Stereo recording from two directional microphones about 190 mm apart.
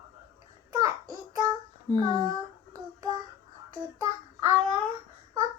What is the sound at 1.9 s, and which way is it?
Speech, 20° right (ahead or behind).